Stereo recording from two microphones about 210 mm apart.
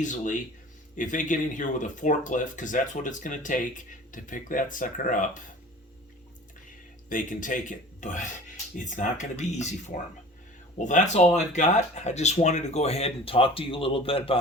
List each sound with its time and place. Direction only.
0.0 s speech: 35° left (ahead or behind)
7.1 s speech: 40° left (ahead or behind)